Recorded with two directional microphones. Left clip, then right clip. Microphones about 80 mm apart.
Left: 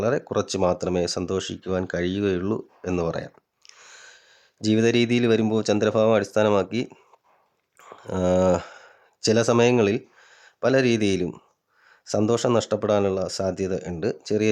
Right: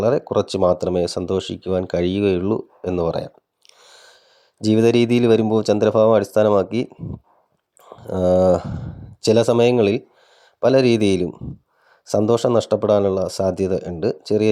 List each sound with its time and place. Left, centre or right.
0.0 s speech: right
3.0 s a sound: right
4.6 s speech: right
8.0 s speech: right
14.0 s speech: right